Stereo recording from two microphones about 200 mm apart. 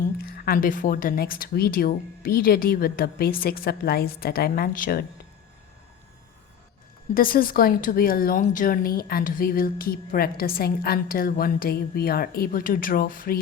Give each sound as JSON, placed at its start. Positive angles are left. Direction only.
{"t": 0.3, "sound": "speech", "side_deg": 45}
{"t": 7.1, "sound": "speech", "side_deg": 45}